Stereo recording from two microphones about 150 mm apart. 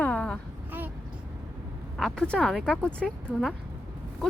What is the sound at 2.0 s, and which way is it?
Speech, 5° left (ahead or behind).